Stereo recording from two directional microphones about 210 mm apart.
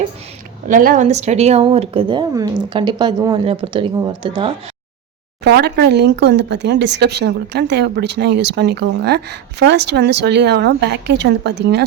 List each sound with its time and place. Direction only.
0.7 s speech: 40° right (ahead or behind); by 4.5 s 25° right (ahead or behind)
5.4 s speech: 50° right (ahead or behind)